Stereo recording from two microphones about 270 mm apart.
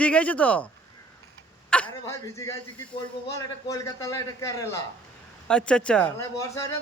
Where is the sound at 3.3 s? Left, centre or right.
Centre.